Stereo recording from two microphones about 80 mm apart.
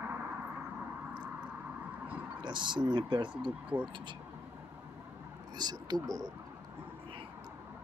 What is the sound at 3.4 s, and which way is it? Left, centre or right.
Speech, centre.